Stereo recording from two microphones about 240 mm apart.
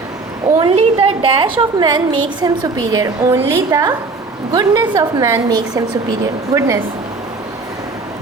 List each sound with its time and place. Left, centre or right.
0.6 s a woman's voice: right